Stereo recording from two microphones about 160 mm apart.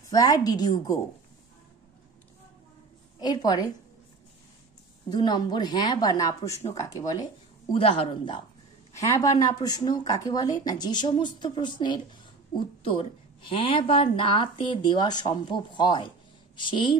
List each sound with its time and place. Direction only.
0.0 s speech: 25° left (ahead or behind)
3.2 s speech: 25° left (ahead or behind)
5.1 s speech: 25° left (ahead or behind)
7.7 s a woman's voice: 35° left (ahead or behind)
8.9 s a woman's voice: 20° left (ahead or behind)